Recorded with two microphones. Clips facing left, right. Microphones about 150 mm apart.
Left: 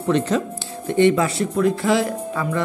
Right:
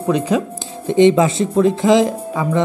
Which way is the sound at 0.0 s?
10° right (ahead or behind).